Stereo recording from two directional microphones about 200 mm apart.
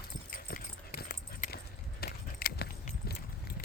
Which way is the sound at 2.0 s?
50° left (ahead or behind).